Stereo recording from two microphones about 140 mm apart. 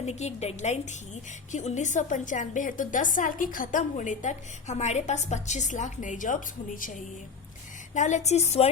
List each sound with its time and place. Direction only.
0.0 s a woman's voice: 50° left (ahead or behind); by 7.0 s 70° left (ahead or behind)
7.9 s a woman's voice: 60° left (ahead or behind)